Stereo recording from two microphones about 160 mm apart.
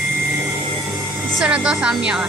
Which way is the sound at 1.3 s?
5° right (ahead or behind).